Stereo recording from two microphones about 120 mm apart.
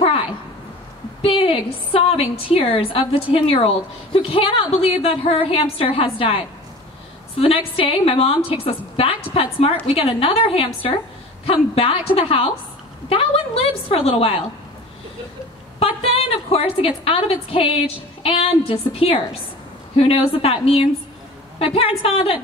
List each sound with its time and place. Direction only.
0.0 s a sound: 50° left (ahead or behind)
1.2 s a woman's voice: 50° left (ahead or behind)
16.0 s a woman's voice: 50° left (ahead or behind)